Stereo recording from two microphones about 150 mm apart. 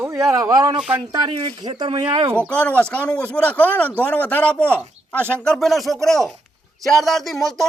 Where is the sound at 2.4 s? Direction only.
5° left (ahead or behind).